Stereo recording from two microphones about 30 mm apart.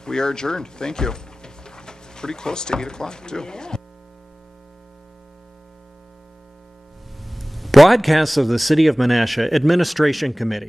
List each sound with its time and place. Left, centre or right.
0.0 s speech: left
7.2 s speech: centre